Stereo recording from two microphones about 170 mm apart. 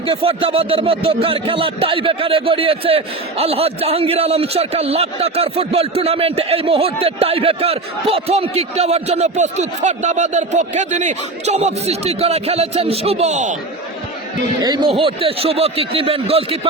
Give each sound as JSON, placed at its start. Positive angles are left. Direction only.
{"t": 0.0, "sound": "speech", "side_deg": -30}
{"t": 14.6, "sound": "speech", "side_deg": -25}